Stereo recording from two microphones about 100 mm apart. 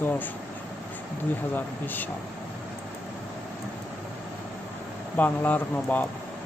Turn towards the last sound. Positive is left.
turn(degrees=15)  # may be behind; listen again after turning